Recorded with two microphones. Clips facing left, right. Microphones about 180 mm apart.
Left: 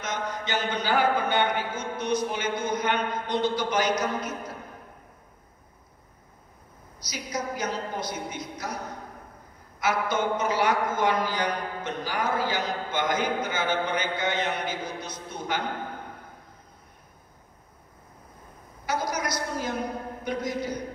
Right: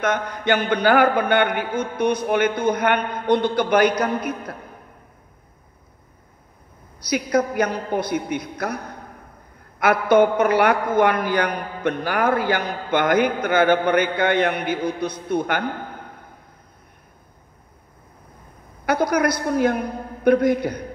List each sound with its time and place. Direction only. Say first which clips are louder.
0.0 s a man's voice: right 9 dB; 60° right (ahead or behind)
7.0 s a man's voice: right 13 dB; 60° right (ahead or behind)
18.9 s a man's voice: right 10 dB; 60° right (ahead or behind)